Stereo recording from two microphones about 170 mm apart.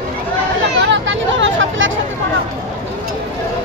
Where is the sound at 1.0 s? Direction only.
90° right.